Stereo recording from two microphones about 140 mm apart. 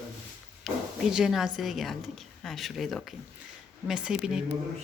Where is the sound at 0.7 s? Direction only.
Centre (ahead or behind).